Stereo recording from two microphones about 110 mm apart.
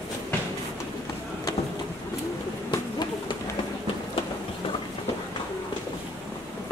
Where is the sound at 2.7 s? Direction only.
40° left (ahead or behind).